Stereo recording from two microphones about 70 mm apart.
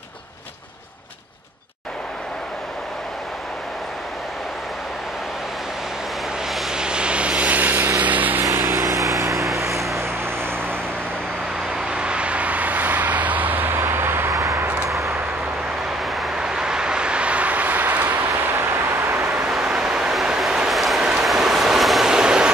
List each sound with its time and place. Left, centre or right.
6.5 s vehicle: centre
6.8 s a sound: centre
8.5 s vehicle: right
11.7 s vehicle: centre; by 14.3 s right
14.3 s vehicle: right
16.0 s vehicle: centre; by 19.4 s right
19.4 s vehicle: centre
21.0 s train: centre